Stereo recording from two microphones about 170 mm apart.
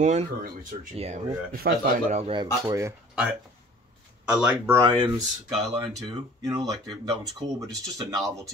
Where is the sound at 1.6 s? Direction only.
85° right.